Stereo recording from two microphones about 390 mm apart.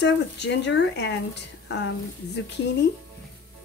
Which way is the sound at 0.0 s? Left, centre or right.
Left.